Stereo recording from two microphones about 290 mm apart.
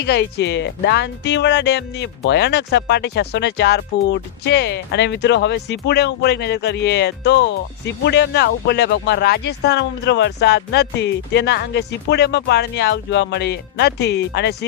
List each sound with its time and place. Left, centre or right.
0.0 s speech: left